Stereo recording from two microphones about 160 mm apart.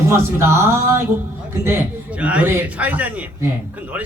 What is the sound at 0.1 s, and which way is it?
A man's voice, 15° right (ahead or behind).